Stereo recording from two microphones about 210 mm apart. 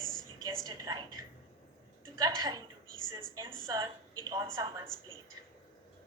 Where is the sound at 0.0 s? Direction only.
Centre (ahead or behind).